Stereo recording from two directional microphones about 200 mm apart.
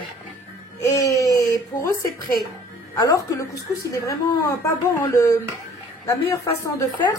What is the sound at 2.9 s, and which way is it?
Speech, 15° left (ahead or behind).